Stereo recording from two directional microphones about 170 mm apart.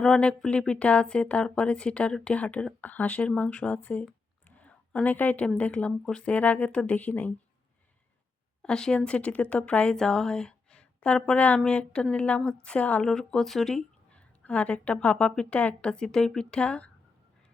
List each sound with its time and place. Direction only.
0.0 s speech: 5° left (ahead or behind)
8.6 s a woman's voice: 5° left (ahead or behind)